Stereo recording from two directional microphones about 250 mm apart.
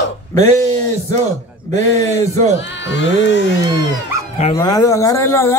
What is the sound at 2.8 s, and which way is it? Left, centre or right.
Speech, left.